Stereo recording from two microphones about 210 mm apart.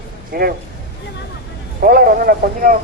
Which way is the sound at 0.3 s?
45° right (ahead or behind).